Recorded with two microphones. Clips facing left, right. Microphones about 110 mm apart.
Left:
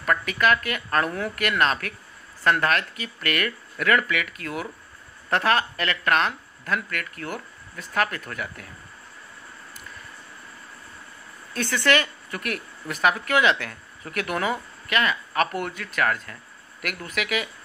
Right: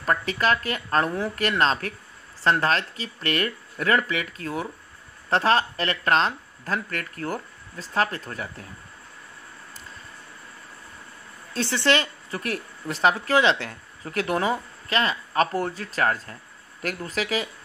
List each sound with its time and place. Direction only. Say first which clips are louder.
0.0 s a woman's voice: left 1 dB; 30° right (ahead or behind)
11.5 s a woman's voice: even; 25° right (ahead or behind)